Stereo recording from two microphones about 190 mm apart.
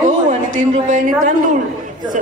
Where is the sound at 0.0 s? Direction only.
40° right (ahead or behind).